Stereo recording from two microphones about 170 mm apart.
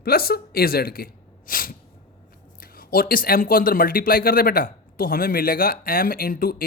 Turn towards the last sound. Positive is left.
turn(degrees=60)  # may be behind; listen again after turning